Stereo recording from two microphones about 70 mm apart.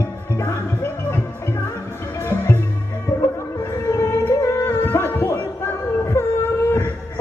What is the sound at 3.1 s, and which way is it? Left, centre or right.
Music, left.